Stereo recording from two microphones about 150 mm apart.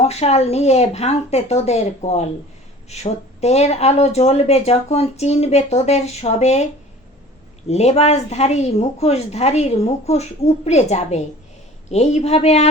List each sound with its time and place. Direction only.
0.0 s speech: 45° left (ahead or behind)
7.7 s speech: 45° left (ahead or behind)